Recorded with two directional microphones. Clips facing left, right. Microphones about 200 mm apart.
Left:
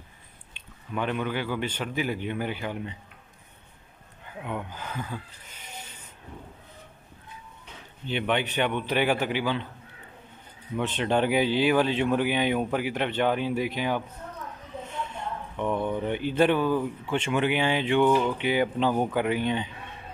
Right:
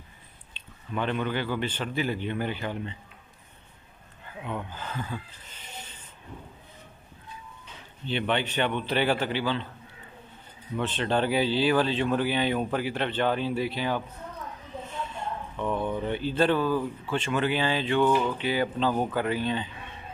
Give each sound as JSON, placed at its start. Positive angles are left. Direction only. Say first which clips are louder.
{"t": 0.6, "sound": "speech", "louder": "even", "side_deg": 10}
{"t": 4.4, "sound": "speech", "louder": "left 1 dB", "side_deg": 10}
{"t": 8.1, "sound": "speech", "louder": "left 1 dB", "side_deg": 10}
{"t": 10.8, "sound": "speech", "louder": "left 1 dB", "side_deg": 15}
{"t": 15.5, "sound": "speech", "louder": "left 2 dB", "side_deg": 10}